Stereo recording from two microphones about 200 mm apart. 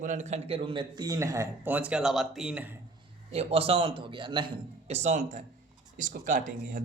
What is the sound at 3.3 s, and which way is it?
A man's voice, 30° right (ahead or behind).